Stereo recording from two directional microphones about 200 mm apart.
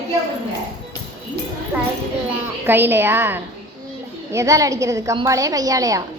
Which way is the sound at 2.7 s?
10° right (ahead or behind).